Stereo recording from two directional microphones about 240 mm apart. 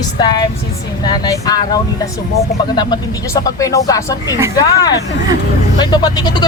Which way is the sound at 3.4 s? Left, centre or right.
Centre.